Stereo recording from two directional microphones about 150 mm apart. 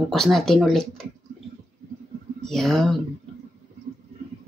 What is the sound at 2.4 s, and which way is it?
Speech, 5° left (ahead or behind).